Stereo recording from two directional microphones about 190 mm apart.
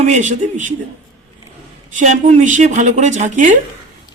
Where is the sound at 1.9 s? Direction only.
40° right (ahead or behind).